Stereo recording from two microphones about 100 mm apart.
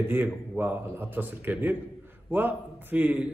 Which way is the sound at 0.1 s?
20° right (ahead or behind).